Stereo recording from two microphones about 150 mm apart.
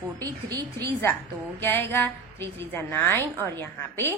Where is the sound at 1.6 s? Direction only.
15° left (ahead or behind).